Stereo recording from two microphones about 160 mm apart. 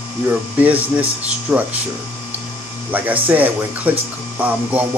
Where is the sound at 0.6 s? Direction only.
10° right (ahead or behind).